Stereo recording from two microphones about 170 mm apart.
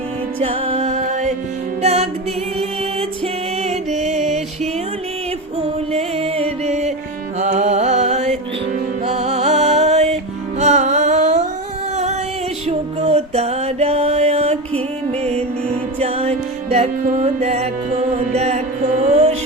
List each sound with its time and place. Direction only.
0.3 s music: 35° right (ahead or behind)
3.6 s music: 40° right (ahead or behind)
5.5 s music: 35° right (ahead or behind)
12.6 s music: 40° right (ahead or behind)